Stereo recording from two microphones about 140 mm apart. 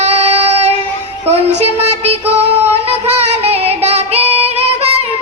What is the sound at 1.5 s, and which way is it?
Child singing, 50° right (ahead or behind).